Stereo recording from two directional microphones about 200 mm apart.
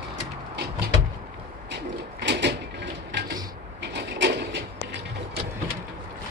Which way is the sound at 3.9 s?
60° right (ahead or behind).